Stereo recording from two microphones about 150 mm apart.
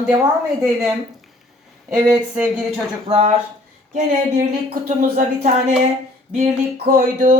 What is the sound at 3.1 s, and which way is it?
Speech, 45° right (ahead or behind).